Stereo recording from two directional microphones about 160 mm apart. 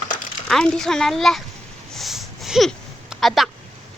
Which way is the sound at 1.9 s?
Centre (ahead or behind).